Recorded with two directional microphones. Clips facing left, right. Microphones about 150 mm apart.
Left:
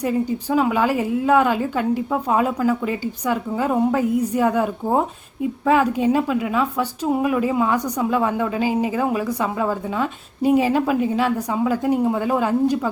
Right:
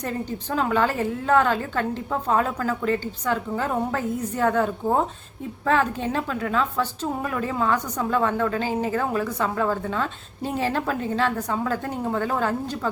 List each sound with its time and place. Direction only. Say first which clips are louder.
0.0 s a woman's voice: left 7 dB; 10° left (ahead or behind)